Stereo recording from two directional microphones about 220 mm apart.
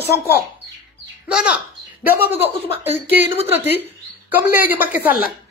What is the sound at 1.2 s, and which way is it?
Speech, 5° right (ahead or behind).